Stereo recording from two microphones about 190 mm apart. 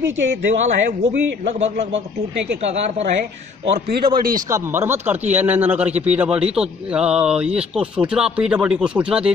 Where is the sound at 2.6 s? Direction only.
35° right (ahead or behind).